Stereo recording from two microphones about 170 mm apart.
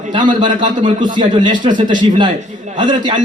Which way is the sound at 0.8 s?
25° right (ahead or behind).